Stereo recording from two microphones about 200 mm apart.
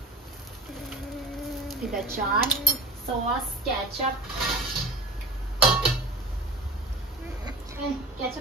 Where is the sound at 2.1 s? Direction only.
45° right (ahead or behind).